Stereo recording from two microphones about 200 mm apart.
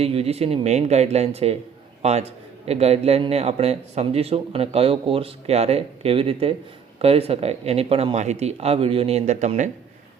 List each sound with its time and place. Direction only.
0.0 s a man's voice: 30° right (ahead or behind)